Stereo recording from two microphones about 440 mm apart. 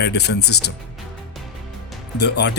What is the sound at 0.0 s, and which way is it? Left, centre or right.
Speech, left.